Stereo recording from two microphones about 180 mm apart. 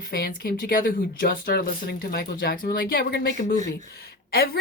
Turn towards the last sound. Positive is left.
turn(degrees=60)  # may be behind; listen again after turning